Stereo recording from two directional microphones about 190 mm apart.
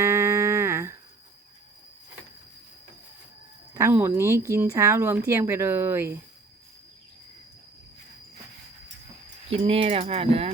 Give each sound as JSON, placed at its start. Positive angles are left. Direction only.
{"t": 0.0, "sound": "music", "side_deg": -15}
{"t": 3.8, "sound": "speech", "side_deg": -15}
{"t": 9.5, "sound": "speech", "side_deg": -30}